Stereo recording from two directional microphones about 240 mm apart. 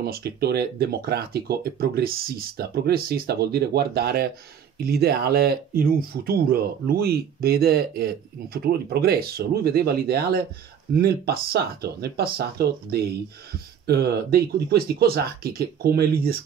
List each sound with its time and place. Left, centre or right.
0.0 s speech: right